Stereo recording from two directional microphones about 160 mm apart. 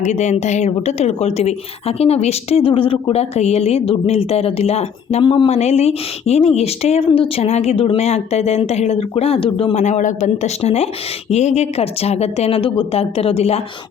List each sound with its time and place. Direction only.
0.0 s speech: 45° left (ahead or behind)
5.2 s speech: 30° left (ahead or behind)
5.5 s speech: 45° left (ahead or behind)